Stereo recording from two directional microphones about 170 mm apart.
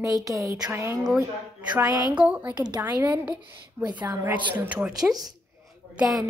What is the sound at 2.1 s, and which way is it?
A woman's voice, 10° right (ahead or behind).